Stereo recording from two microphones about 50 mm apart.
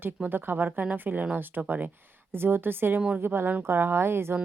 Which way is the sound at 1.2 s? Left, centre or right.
Right.